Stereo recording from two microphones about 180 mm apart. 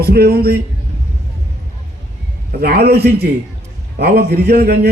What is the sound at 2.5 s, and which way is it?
A man's voice, 60° right (ahead or behind).